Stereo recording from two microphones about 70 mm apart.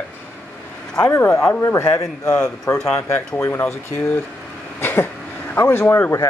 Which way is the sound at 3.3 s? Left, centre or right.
Left.